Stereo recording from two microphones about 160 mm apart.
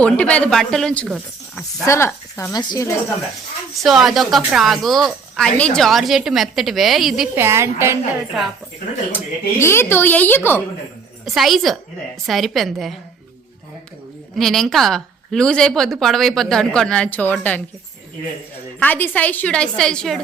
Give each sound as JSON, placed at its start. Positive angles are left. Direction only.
{"t": 0.0, "sound": "a woman's voice", "side_deg": 5}
{"t": 1.5, "sound": "a woman's voice", "side_deg": 15}
{"t": 3.8, "sound": "a woman's voice", "side_deg": 0}
{"t": 7.3, "sound": "a woman's voice", "side_deg": -15}
{"t": 8.3, "sound": "a woman's voice", "side_deg": 0}
{"t": 9.1, "sound": "a woman's voice", "side_deg": 15}
{"t": 11.3, "sound": "a woman's voice", "side_deg": 0}
{"t": 14.3, "sound": "a woman's voice", "side_deg": 0}
{"t": 18.8, "sound": "a woman's voice", "side_deg": 10}